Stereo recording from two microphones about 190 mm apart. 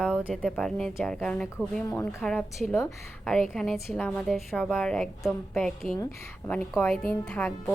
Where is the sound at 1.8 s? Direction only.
15° left (ahead or behind).